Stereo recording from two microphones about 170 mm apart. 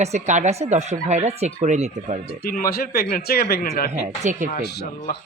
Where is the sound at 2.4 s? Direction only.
60° left (ahead or behind).